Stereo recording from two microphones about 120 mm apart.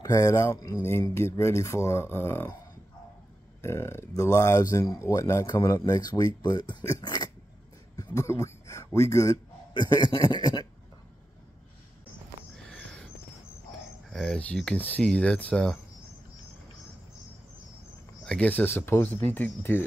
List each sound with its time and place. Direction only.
0.0 s speech: 25° left (ahead or behind)
3.6 s speech: 20° left (ahead or behind)
9.8 s speech: 40° left (ahead or behind)
12.6 s a sound: 5° left (ahead or behind)
14.1 s speech: 5° left (ahead or behind)
18.2 s speech: 10° left (ahead or behind)